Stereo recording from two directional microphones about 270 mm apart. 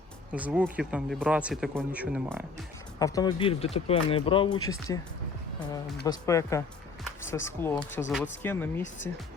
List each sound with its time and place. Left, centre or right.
0.3 s speech: centre
3.0 s speech: centre
6.1 s speech: centre